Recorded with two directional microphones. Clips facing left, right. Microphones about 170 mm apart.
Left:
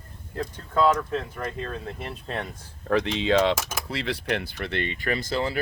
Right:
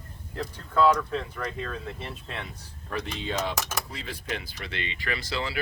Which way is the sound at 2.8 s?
90° left.